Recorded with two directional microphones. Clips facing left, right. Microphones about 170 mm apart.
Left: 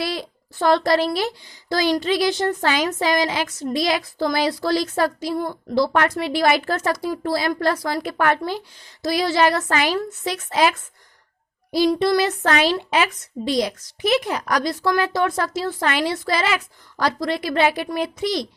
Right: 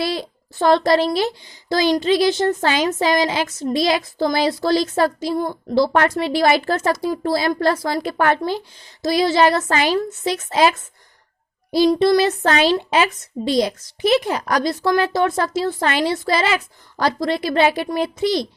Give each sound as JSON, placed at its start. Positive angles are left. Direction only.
{"t": 0.0, "sound": "speech", "side_deg": -25}